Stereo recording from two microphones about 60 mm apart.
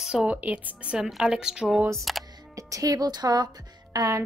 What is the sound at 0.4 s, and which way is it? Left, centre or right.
Speech, right.